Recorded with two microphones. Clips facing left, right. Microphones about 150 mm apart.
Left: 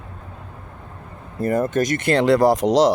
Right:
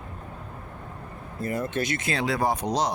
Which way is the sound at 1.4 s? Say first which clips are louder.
Left 8 dB; 55° left (ahead or behind).